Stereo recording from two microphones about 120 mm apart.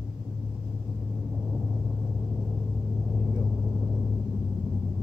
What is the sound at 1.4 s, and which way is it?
Vehicle, centre (ahead or behind).